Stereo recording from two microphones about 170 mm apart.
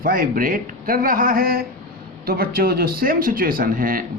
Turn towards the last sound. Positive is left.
turn(degrees=-55)  # may be behind; listen again after turning